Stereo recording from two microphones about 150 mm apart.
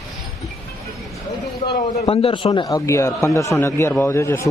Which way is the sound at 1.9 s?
40° left (ahead or behind).